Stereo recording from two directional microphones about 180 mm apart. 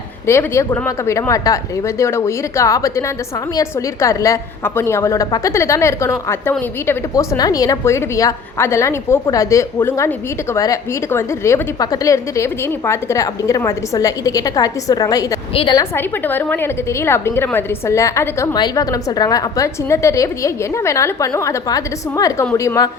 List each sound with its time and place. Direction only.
0.3 s a woman's voice: 15° left (ahead or behind)
16.0 s a woman's voice: 10° left (ahead or behind)